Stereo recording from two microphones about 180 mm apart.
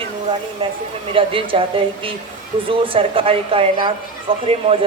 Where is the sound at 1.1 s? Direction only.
30° right (ahead or behind).